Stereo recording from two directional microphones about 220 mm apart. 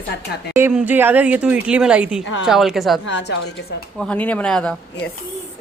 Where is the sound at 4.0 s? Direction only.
5° left (ahead or behind).